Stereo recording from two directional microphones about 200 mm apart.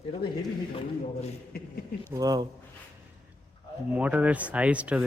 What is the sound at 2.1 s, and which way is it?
Speech, 20° right (ahead or behind).